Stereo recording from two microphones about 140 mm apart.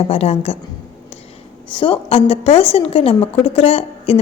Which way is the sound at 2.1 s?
45° left (ahead or behind).